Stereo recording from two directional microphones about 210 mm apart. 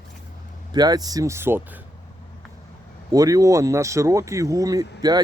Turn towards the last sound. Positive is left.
turn(degrees=-15)  # may be behind; listen again after turning